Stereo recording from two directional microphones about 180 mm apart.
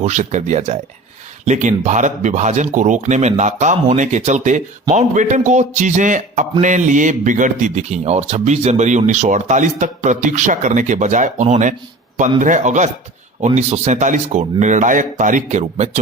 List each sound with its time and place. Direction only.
0.0 s speech: 45° right (ahead or behind)